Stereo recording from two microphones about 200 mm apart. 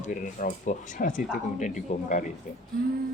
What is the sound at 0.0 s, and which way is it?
Speech, 40° left (ahead or behind).